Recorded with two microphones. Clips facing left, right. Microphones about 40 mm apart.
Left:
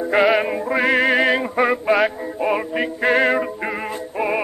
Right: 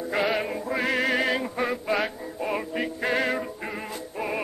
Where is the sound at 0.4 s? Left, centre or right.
Left.